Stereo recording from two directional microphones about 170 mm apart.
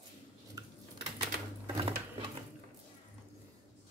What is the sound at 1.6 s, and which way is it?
Sewing machine, 25° right (ahead or behind).